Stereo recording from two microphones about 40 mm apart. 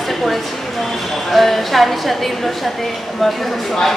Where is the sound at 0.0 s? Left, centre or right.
Centre.